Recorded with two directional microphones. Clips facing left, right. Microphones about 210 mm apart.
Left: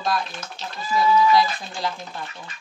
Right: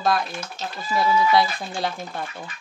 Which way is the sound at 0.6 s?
55° right (ahead or behind).